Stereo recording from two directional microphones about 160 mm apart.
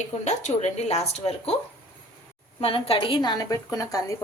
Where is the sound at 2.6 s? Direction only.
35° left (ahead or behind).